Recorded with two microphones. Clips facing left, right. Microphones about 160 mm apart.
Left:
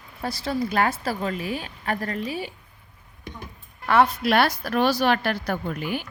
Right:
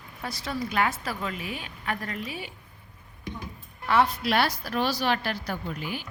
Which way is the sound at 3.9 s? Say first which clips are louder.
Left 4 dB; 55° left (ahead or behind).